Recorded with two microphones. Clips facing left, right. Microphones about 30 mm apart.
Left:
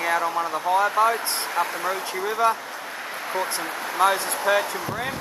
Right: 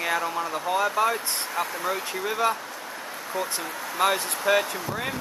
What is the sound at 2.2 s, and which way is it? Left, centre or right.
Speech, centre.